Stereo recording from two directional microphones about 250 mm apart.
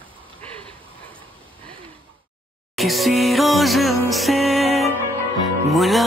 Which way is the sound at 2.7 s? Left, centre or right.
Centre.